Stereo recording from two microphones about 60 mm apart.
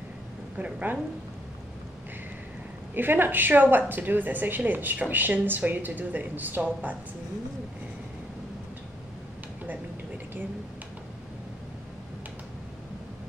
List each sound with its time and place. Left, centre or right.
0.6 s a woman's voice: right
2.9 s a woman's voice: right
9.7 s a sound: right